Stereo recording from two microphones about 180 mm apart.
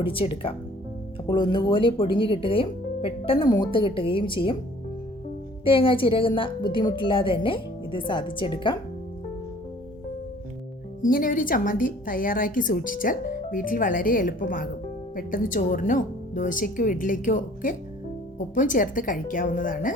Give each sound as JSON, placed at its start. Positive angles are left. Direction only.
{"t": 0.0, "sound": "speech", "side_deg": 30}
{"t": 5.6, "sound": "speech", "side_deg": 30}
{"t": 11.0, "sound": "a woman's voice", "side_deg": 50}